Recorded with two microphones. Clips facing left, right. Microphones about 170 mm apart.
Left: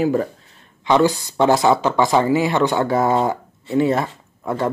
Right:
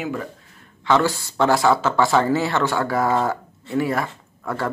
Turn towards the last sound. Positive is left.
turn(degrees=20)  # may be behind; listen again after turning